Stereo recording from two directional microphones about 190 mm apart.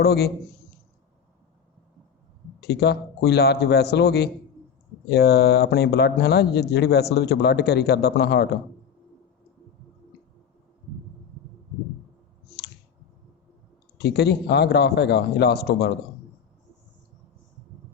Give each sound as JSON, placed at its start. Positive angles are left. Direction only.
{"t": 0.0, "sound": "speech", "side_deg": 60}
{"t": 2.6, "sound": "speech", "side_deg": 60}
{"t": 14.0, "sound": "speech", "side_deg": 60}